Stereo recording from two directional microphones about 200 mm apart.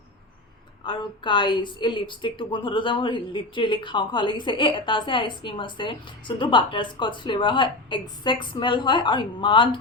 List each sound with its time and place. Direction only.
0.9 s a woman's voice: 25° left (ahead or behind)